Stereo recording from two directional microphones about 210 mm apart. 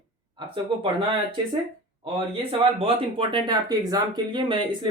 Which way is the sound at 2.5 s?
25° right (ahead or behind).